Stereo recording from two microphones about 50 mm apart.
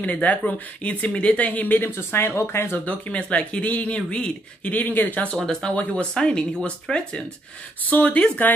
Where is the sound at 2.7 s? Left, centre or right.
Left.